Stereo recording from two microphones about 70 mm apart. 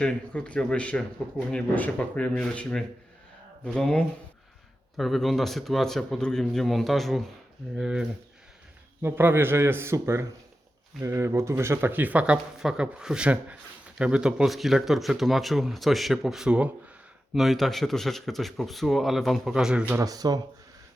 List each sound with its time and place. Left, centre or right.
0.0 s speech: centre
4.9 s speech: centre
7.8 s speech: centre
9.0 s a man's voice: right
11.9 s speech: right; by 19.5 s centre
19.5 s speech: centre
20.0 s speech: right